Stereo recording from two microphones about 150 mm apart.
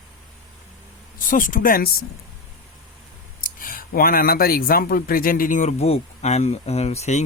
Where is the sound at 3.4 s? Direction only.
75° left (ahead or behind).